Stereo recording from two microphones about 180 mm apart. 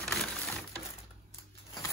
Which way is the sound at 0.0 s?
Centre (ahead or behind).